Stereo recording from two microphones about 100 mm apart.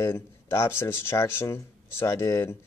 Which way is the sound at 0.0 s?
25° left (ahead or behind).